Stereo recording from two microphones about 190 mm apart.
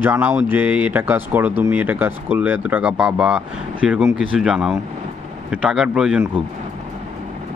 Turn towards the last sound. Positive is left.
turn(degrees=-5)  # may be behind; listen again after turning